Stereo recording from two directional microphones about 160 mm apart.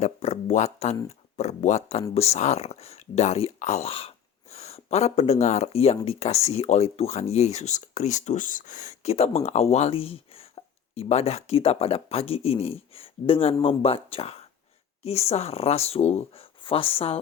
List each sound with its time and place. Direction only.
0.0 s speech: 45° left (ahead or behind)